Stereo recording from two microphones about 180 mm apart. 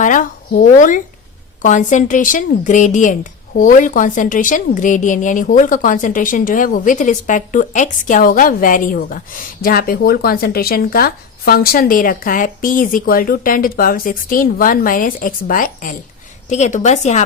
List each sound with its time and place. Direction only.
0.0 s a woman's voice: 45° left (ahead or behind)